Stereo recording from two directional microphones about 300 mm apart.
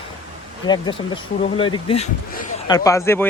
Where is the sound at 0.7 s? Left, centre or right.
Centre.